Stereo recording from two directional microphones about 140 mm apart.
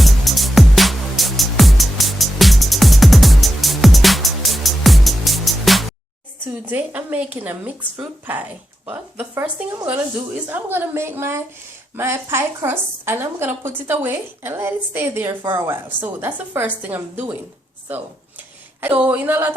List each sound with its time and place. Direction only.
0.0 s music: centre (ahead or behind)
6.4 s a woman's voice: 15° right (ahead or behind)